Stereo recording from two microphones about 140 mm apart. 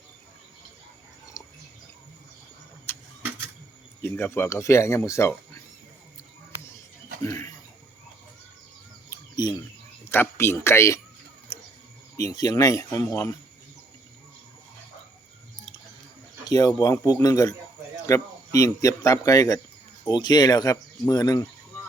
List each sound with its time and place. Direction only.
1.4 s a sound: 20° left (ahead or behind)
2.9 s vehicle: 15° left (ahead or behind)
4.0 s speech: 15° left (ahead or behind)
7.2 s a sound: 20° left (ahead or behind)
9.3 s speech: 30° left (ahead or behind)
10.1 s speech: 15° left (ahead or behind)
12.1 s speech: 25° left (ahead or behind)
16.5 s speech: 25° left (ahead or behind)